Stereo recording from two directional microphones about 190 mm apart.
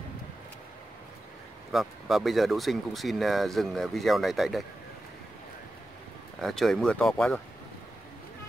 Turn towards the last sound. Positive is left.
turn(degrees=0)  # may be behind; listen again after turning